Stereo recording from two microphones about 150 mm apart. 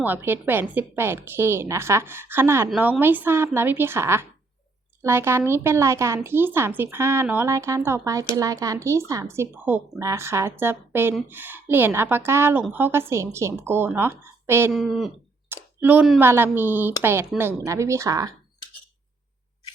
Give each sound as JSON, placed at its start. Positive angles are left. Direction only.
{"t": 0.0, "sound": "a woman's voice", "side_deg": -15}
{"t": 14.7, "sound": "speech", "side_deg": 0}
{"t": 15.4, "sound": "a sound", "side_deg": -10}
{"t": 16.2, "sound": "a woman's voice", "side_deg": -15}